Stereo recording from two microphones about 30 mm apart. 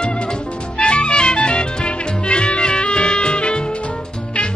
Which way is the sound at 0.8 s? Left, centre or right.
Left.